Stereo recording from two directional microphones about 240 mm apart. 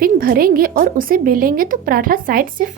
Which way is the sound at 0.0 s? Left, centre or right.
Right.